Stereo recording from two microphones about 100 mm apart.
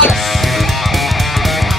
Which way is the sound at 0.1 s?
Centre (ahead or behind).